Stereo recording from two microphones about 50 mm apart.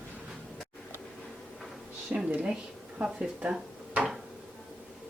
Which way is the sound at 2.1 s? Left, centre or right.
Right.